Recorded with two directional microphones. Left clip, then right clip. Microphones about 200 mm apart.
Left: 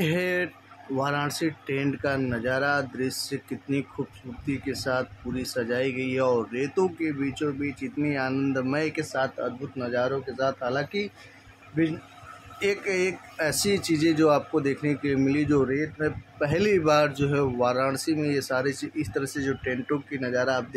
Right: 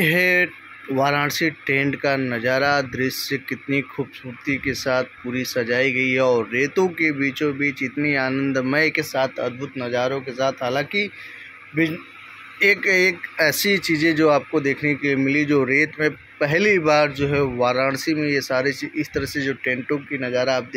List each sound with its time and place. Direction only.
0.0 s a sound: 10° right (ahead or behind)
0.9 s speech: 15° right (ahead or behind)
12.5 s a man's voice: 10° right (ahead or behind)